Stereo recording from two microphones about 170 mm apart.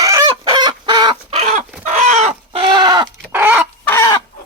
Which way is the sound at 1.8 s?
40° right (ahead or behind).